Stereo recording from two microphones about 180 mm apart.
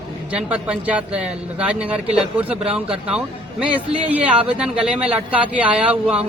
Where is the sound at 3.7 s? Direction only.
10° right (ahead or behind).